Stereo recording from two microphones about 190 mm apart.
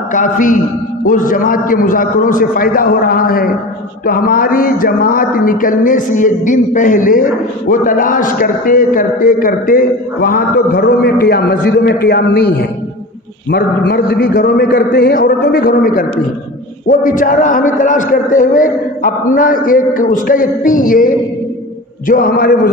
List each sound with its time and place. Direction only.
0.1 s a man's voice: 45° left (ahead or behind)